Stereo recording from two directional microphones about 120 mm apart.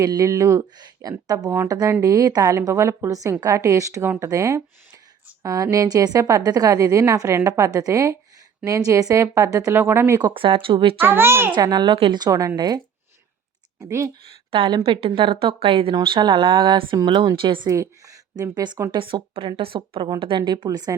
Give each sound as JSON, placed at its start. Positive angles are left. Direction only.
{"t": 0.0, "sound": "a woman's voice", "side_deg": -30}
{"t": 10.3, "sound": "a woman's voice", "side_deg": -50}
{"t": 11.0, "sound": "a woman's voice", "side_deg": -20}
{"t": 11.5, "sound": "speech", "side_deg": -35}
{"t": 11.9, "sound": "a woman's voice", "side_deg": -50}
{"t": 12.2, "sound": "speech", "side_deg": -30}
{"t": 14.5, "sound": "a woman's voice", "side_deg": -50}
{"t": 17.7, "sound": "a woman's voice", "side_deg": -30}